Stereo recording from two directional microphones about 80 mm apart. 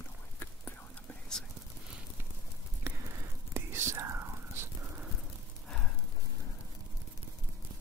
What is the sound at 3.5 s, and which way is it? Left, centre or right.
Whispering, right.